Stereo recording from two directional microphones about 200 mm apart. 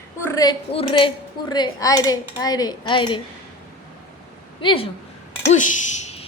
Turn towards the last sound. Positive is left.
turn(degrees=35)  # may be behind; listen again after turning